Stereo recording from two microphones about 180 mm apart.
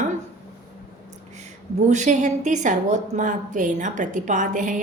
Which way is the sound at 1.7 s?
40° right (ahead or behind).